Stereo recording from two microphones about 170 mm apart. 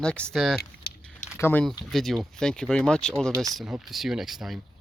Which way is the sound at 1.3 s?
10° left (ahead or behind).